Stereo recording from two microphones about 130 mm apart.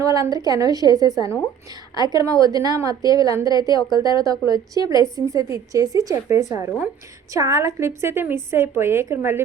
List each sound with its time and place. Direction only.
0.0 s a woman's voice: 25° right (ahead or behind)